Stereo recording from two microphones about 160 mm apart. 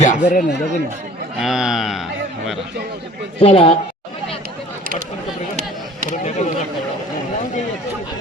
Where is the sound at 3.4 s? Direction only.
35° left (ahead or behind).